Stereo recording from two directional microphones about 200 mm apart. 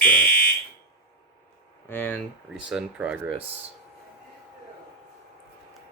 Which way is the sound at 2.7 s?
5° right (ahead or behind).